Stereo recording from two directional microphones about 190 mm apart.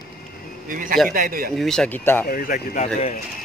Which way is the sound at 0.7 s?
45° right (ahead or behind).